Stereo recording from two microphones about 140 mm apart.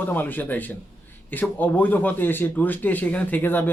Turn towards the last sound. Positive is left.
turn(degrees=15)  # may be behind; listen again after turning